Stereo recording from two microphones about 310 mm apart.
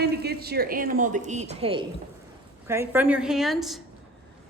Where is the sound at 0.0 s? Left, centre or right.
Right.